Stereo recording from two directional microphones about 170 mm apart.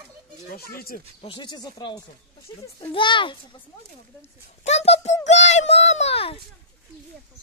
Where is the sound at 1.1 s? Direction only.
30° left (ahead or behind).